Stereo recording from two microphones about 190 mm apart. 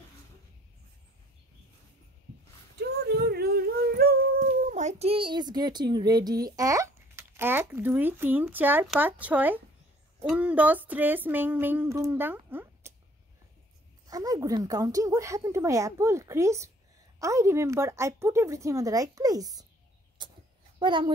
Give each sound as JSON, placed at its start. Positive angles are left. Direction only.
{"t": 3.1, "sound": "dog", "side_deg": -55}
{"t": 8.8, "sound": "a woman's voice", "side_deg": 0}
{"t": 14.0, "sound": "a woman's voice", "side_deg": -20}
{"t": 20.2, "sound": "a sound", "side_deg": -25}
{"t": 20.8, "sound": "speech", "side_deg": -25}